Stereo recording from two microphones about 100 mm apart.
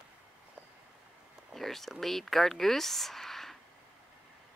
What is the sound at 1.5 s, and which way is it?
Speech, 5° left (ahead or behind).